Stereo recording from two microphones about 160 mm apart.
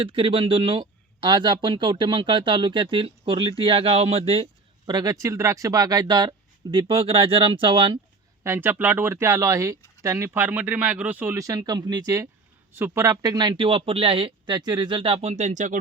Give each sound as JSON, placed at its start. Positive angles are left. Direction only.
{"t": 0.0, "sound": "speech", "side_deg": -35}
{"t": 4.9, "sound": "speech", "side_deg": -25}
{"t": 8.4, "sound": "speech", "side_deg": -15}